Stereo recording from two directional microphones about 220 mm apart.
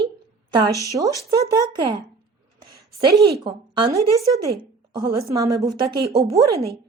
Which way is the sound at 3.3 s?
20° right (ahead or behind).